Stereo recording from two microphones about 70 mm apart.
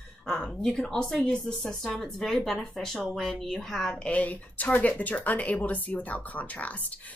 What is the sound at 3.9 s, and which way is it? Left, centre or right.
Speech, centre.